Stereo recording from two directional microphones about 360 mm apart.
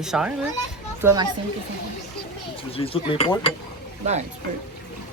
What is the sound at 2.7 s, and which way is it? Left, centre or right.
Mechanisms, centre.